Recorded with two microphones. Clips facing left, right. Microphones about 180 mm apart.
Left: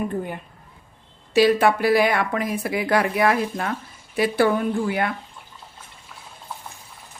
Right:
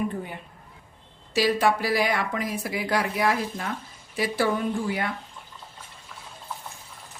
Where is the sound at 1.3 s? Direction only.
60° left (ahead or behind).